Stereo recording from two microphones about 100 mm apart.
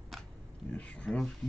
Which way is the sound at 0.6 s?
15° left (ahead or behind).